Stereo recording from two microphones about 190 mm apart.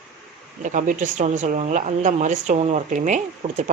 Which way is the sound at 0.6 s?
40° right (ahead or behind).